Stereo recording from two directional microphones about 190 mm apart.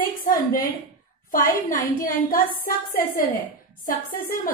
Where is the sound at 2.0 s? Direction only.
50° left (ahead or behind).